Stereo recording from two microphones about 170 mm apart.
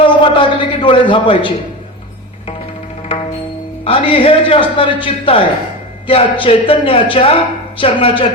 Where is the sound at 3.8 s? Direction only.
35° left (ahead or behind).